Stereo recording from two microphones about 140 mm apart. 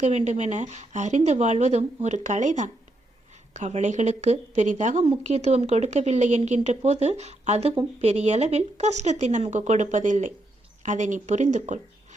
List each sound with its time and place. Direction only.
0.1 s a woman's voice: 55° right (ahead or behind)